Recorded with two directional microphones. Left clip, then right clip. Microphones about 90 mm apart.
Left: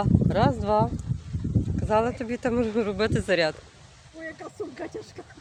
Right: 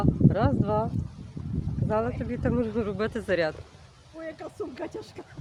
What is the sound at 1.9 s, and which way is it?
Speech, 45° left (ahead or behind).